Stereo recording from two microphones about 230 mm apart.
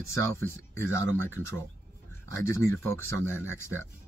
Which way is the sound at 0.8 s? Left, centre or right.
Right.